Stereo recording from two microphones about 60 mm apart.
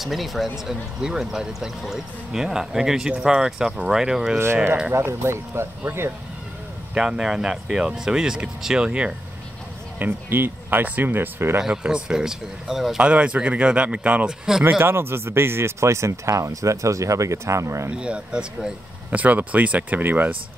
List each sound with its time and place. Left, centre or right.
0.0 s speech: centre
4.9 s speech: right
6.9 s speech: centre
9.9 s speech: right
11.6 s speech: centre
13.0 s speech: centre
14.6 s speech: right
17.9 s speech: centre
19.0 s speech: right